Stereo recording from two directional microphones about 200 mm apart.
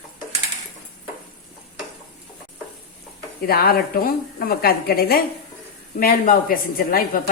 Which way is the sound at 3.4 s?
50° left (ahead or behind).